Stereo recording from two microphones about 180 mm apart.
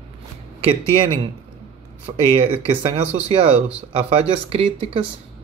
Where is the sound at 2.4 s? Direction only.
35° right (ahead or behind).